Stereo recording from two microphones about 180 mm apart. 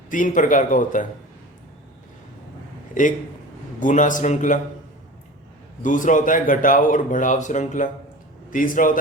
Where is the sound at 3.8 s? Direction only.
45° left (ahead or behind).